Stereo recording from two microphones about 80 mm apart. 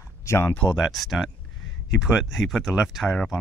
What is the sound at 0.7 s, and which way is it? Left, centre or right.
Speech, centre.